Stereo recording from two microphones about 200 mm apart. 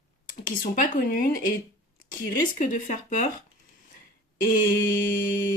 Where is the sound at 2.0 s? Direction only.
40° left (ahead or behind).